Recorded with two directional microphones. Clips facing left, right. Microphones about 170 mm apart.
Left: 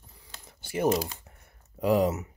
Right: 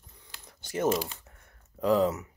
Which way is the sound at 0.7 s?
10° left (ahead or behind).